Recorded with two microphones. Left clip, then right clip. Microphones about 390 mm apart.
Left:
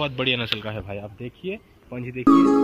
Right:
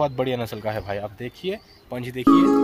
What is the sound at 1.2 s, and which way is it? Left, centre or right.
Speech, right.